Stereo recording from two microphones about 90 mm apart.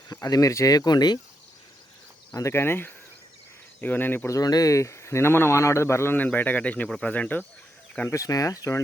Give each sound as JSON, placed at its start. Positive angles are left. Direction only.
{"t": 0.1, "sound": "speech", "side_deg": 45}
{"t": 2.3, "sound": "speech", "side_deg": 30}
{"t": 4.3, "sound": "speech", "side_deg": 45}
{"t": 6.1, "sound": "speech", "side_deg": 20}
{"t": 8.1, "sound": "speech", "side_deg": 40}